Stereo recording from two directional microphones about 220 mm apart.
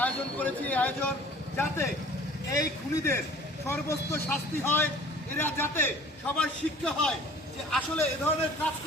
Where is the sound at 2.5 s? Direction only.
15° left (ahead or behind).